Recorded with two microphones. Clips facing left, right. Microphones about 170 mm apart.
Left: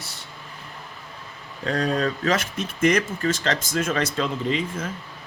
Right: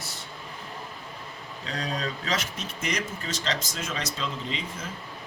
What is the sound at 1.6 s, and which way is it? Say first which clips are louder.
Speech: left 9 dB; 55° left (ahead or behind).